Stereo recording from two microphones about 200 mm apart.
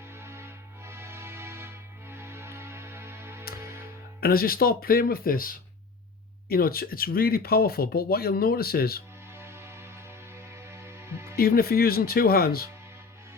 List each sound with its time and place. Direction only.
0.2 s music: 10° right (ahead or behind)
4.2 s speech: 45° left (ahead or behind)
9.4 s music: 10° right (ahead or behind)
11.3 s speech: 50° left (ahead or behind)